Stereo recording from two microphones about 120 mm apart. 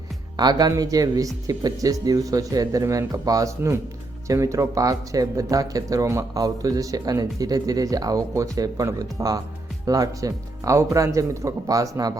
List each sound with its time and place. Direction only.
0.3 s speech: 35° right (ahead or behind)